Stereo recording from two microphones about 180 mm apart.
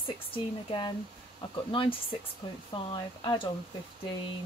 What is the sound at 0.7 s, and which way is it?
Speech, 25° left (ahead or behind).